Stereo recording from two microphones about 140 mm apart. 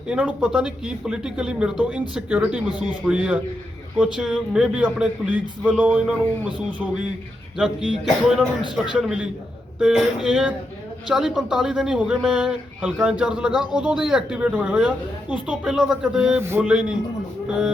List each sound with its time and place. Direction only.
0.1 s a man's voice: 10° right (ahead or behind)
16.4 s speech: 20° right (ahead or behind)